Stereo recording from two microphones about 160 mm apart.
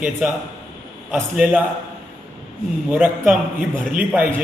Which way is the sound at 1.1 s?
10° right (ahead or behind).